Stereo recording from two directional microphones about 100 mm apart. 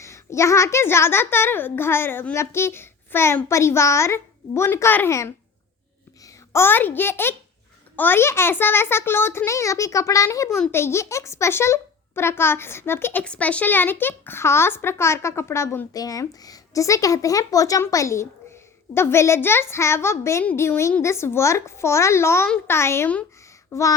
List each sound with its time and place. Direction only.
0.0 s a child's voice: 30° left (ahead or behind)
6.5 s a child's voice: 25° left (ahead or behind)
13.2 s a child's voice: 10° left (ahead or behind)
15.9 s a child's voice: 35° left (ahead or behind)